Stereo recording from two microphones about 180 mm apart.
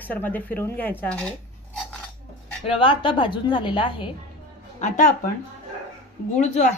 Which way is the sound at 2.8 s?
30° left (ahead or behind).